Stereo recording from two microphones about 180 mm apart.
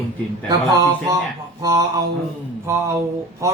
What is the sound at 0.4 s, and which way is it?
Speech, 20° right (ahead or behind).